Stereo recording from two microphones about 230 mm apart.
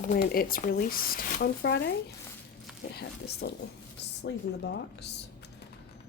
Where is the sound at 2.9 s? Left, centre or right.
Left.